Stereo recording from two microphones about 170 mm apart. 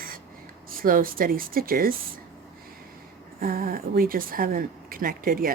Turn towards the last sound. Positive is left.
turn(degrees=-55)  # may be behind; listen again after turning